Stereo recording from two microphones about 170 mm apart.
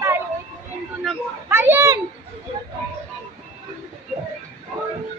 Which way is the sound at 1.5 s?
15° right (ahead or behind).